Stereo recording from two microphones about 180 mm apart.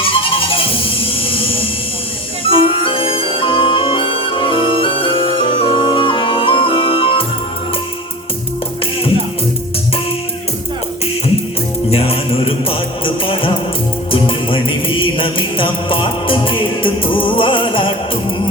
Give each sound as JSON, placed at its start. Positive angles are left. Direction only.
{"t": 0.1, "sound": "music", "side_deg": 30}
{"t": 11.9, "sound": "music", "side_deg": 35}